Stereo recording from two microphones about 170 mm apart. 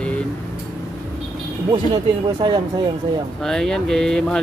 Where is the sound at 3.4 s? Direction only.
5° left (ahead or behind).